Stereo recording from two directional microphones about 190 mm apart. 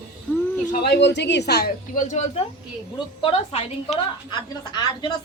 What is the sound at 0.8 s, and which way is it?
Speech, 65° left (ahead or behind).